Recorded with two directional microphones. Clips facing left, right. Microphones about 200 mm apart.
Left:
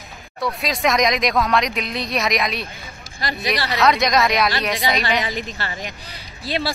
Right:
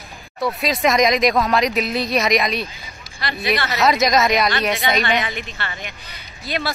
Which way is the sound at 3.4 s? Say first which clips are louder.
Right 2 dB; 35° left (ahead or behind).